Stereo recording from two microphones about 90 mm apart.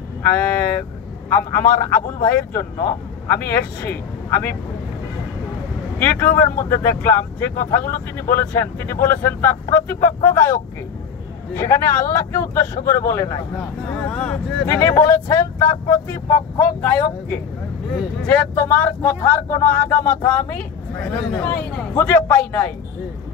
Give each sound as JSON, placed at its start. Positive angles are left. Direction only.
{"t": 1.5, "sound": "speech", "side_deg": 25}
{"t": 5.9, "sound": "speech", "side_deg": 20}
{"t": 13.9, "sound": "speech", "side_deg": 10}
{"t": 14.7, "sound": "speech", "side_deg": 35}